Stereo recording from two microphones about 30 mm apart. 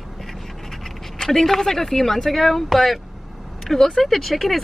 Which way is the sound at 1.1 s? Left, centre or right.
Centre.